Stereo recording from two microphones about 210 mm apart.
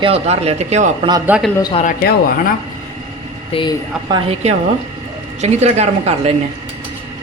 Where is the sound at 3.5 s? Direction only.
20° left (ahead or behind).